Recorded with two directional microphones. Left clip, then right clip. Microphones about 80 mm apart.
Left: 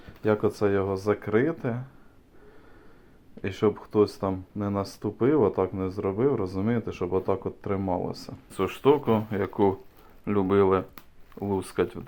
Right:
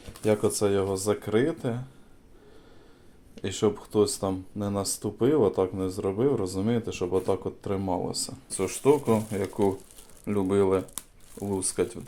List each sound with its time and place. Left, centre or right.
0.3 s speech: right
3.4 s speech: centre
9.4 s speech: centre
11.3 s speech: centre